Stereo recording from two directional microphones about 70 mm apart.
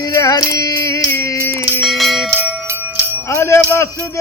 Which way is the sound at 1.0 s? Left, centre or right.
Left.